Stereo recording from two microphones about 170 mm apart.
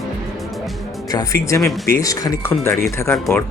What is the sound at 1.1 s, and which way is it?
Speech, 20° left (ahead or behind).